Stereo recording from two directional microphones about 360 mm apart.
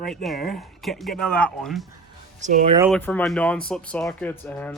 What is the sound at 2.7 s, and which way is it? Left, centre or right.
Speech, centre.